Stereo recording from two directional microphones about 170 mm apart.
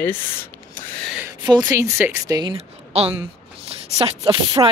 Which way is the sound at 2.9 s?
35° right (ahead or behind).